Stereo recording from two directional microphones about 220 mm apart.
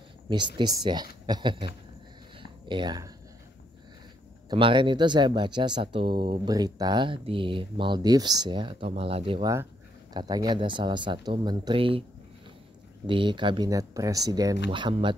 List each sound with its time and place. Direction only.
0.3 s speech: 20° right (ahead or behind)
2.4 s a sound: 20° right (ahead or behind)
4.5 s speech: 20° right (ahead or behind)
13.0 s speech: 20° right (ahead or behind)